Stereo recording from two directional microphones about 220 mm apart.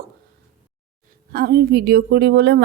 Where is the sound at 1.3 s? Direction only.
45° right (ahead or behind).